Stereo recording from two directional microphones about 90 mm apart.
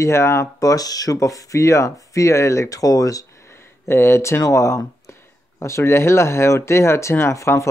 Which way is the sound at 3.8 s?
25° left (ahead or behind).